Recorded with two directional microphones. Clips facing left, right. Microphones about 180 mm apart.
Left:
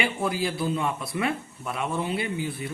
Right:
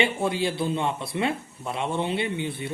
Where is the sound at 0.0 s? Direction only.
25° right (ahead or behind).